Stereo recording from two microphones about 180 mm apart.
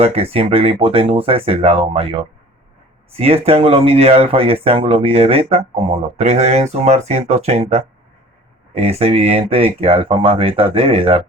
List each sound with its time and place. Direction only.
0.0 s speech: 35° right (ahead or behind)